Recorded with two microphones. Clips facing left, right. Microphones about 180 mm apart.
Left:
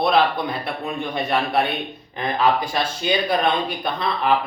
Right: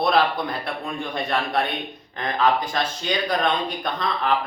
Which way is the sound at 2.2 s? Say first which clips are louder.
Left 1 dB; 10° left (ahead or behind).